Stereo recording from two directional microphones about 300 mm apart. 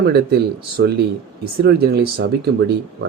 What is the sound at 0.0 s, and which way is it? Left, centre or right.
Speech, right.